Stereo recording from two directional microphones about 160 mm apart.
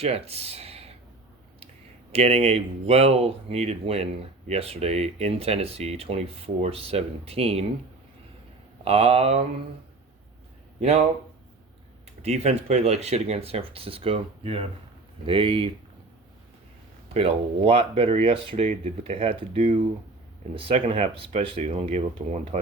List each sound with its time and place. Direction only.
0.0 s speech: 40° right (ahead or behind)
2.1 s speech: 40° right (ahead or behind)
8.8 s speech: 40° right (ahead or behind)
10.8 s speech: 40° right (ahead or behind)
12.2 s speech: 40° right (ahead or behind)
17.2 s speech: 35° right (ahead or behind)